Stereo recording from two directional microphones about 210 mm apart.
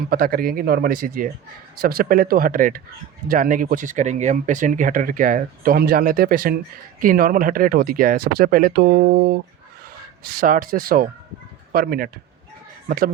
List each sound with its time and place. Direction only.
0.1 s speech: 45° right (ahead or behind)